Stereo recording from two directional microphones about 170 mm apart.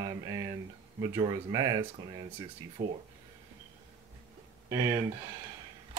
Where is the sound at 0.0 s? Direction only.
25° right (ahead or behind).